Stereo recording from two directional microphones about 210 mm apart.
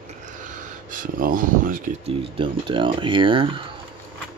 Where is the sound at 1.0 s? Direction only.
40° right (ahead or behind).